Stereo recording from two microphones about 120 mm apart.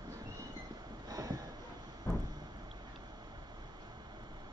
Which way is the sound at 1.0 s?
30° right (ahead or behind).